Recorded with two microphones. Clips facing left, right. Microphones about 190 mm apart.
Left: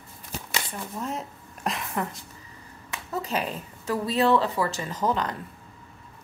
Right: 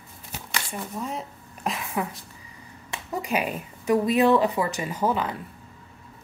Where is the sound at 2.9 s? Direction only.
15° right (ahead or behind).